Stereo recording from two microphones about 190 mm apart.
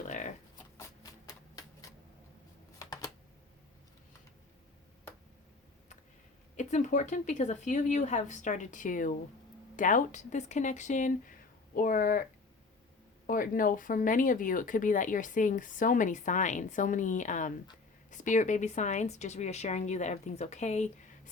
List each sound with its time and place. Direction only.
1.3 s typewriter: 20° left (ahead or behind)
2.7 s typing: 20° left (ahead or behind)
6.6 s a woman's voice: 40° left (ahead or behind)
13.2 s a woman's voice: 45° left (ahead or behind)